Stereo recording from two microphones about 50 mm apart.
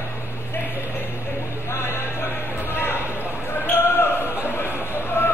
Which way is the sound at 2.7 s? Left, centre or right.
Left.